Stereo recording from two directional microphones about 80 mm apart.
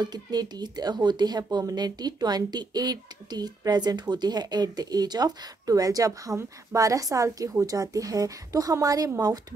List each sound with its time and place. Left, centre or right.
0.0 s speech: right